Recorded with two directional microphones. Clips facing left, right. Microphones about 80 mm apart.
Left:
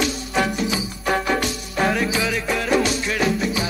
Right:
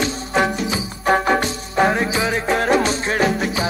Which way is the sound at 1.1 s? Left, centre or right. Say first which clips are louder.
Right 4 dB; right.